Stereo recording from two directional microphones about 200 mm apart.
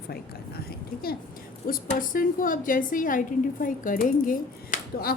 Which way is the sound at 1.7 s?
45° left (ahead or behind).